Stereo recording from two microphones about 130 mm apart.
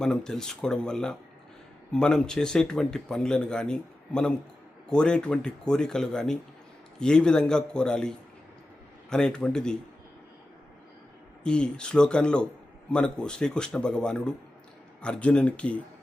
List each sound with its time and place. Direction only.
0.0 s speech: 5° left (ahead or behind)
11.4 s speech: 5° left (ahead or behind)